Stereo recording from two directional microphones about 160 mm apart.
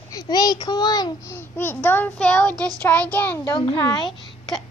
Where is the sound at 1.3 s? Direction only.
15° left (ahead or behind).